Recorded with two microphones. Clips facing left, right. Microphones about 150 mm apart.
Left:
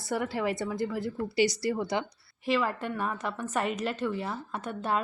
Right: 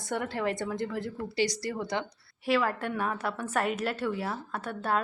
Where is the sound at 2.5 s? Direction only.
5° right (ahead or behind).